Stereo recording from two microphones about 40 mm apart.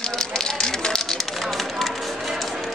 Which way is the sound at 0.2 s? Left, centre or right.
Centre.